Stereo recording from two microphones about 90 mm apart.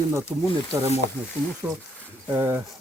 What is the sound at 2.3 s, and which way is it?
Speech, 25° right (ahead or behind).